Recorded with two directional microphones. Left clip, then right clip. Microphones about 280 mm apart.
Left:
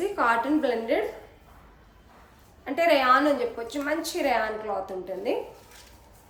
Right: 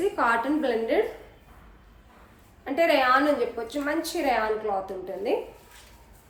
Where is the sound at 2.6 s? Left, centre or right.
Centre.